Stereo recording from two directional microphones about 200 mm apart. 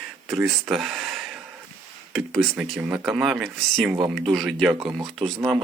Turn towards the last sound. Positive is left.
turn(degrees=0)  # may be behind; listen again after turning